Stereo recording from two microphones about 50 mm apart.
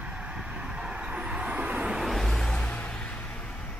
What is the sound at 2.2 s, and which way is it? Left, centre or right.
Music, centre.